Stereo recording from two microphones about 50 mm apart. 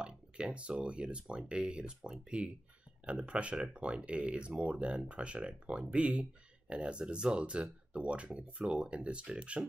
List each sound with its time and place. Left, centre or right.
0.0 s speech: right